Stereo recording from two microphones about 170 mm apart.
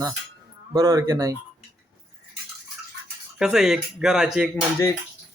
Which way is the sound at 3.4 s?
5° right (ahead or behind).